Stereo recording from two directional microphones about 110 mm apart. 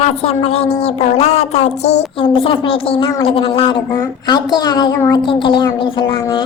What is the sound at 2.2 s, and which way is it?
Speech, 50° left (ahead or behind).